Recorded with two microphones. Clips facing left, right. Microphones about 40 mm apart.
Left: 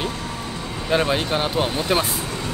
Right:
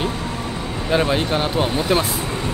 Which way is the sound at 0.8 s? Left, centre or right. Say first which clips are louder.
Right 1 dB; centre.